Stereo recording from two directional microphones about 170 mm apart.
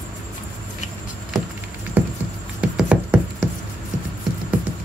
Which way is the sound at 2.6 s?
5° right (ahead or behind).